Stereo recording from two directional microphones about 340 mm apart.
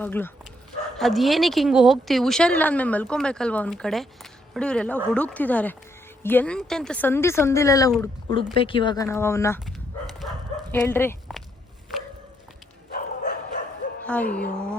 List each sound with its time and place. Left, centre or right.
0.0 s speech: centre
10.2 s dog: centre
12.9 s bow-wow: left
14.0 s speech: centre